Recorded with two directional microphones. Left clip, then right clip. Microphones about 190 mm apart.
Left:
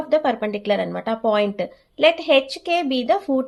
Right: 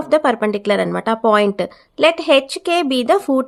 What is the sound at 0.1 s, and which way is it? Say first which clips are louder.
A woman's voice: right 5 dB; 30° right (ahead or behind).